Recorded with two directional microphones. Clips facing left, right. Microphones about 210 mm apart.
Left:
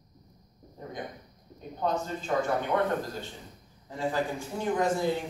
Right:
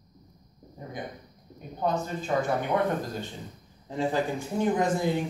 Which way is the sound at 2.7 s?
15° right (ahead or behind).